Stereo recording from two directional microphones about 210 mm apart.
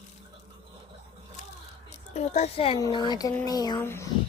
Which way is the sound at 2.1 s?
35° left (ahead or behind).